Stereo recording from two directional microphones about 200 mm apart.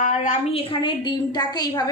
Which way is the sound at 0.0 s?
35° left (ahead or behind).